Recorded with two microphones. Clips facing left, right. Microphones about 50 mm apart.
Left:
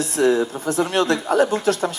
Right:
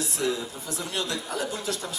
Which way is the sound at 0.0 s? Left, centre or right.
Left.